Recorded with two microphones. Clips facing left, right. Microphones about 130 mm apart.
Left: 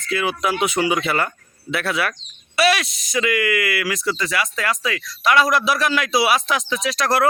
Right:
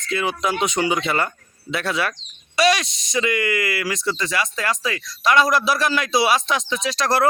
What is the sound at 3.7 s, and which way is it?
Speech, 25° right (ahead or behind).